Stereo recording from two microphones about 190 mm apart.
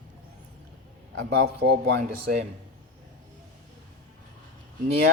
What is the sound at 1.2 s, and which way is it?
Speech, 60° right (ahead or behind).